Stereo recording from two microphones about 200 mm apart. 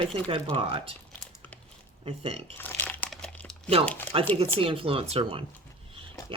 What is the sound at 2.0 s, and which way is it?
Speech, 30° right (ahead or behind).